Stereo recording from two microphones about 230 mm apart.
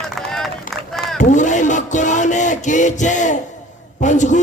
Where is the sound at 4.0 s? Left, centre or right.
Left.